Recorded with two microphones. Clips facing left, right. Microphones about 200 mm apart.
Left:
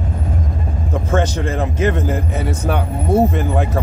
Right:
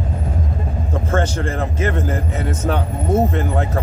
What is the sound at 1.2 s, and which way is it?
Speech, 15° left (ahead or behind).